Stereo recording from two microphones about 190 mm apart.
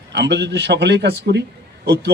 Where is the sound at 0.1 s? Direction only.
65° right (ahead or behind).